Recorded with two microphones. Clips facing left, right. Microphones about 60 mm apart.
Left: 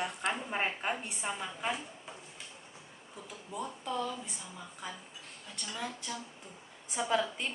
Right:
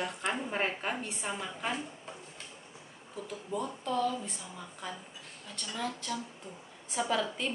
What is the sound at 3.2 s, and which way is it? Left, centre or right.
A woman's voice, centre.